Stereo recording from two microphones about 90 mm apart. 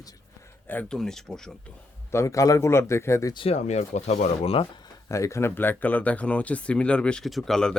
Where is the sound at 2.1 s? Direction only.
30° left (ahead or behind).